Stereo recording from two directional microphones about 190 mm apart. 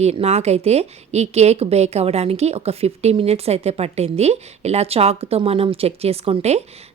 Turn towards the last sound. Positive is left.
turn(degrees=-35)  # may be behind; listen again after turning